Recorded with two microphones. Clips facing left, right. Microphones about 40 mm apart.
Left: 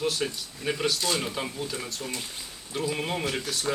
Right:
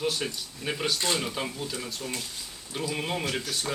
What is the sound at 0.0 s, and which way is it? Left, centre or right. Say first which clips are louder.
A man's voice: left 1 dB; centre.